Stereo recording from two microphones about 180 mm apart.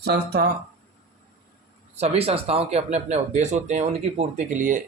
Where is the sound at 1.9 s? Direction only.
35° right (ahead or behind).